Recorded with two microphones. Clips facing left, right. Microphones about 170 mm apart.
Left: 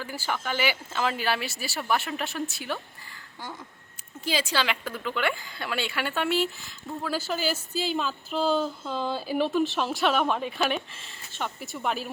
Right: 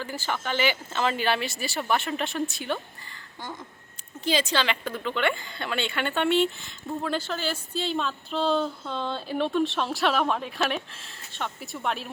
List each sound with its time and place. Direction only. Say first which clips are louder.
0.0 s speech: right 1 dB; 10° left (ahead or behind)
4.2 s speech: right 2 dB; 5° left (ahead or behind)